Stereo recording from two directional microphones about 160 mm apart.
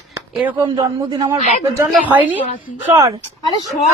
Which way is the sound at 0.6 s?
25° right (ahead or behind).